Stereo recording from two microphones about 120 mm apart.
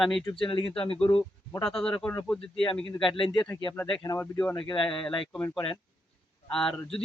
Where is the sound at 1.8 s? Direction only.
5° left (ahead or behind).